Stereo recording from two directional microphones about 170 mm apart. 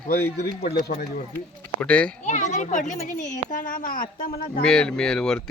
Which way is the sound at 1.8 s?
5° left (ahead or behind).